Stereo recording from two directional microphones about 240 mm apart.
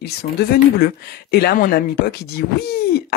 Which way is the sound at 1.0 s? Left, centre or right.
Left.